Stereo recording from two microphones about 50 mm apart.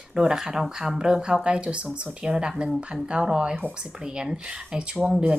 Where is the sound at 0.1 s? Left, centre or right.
Centre.